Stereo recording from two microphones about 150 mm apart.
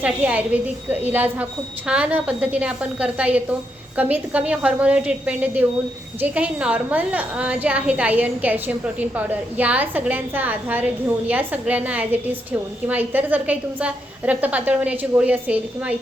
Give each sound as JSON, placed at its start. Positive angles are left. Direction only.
{"t": 0.0, "sound": "a woman's voice", "side_deg": -10}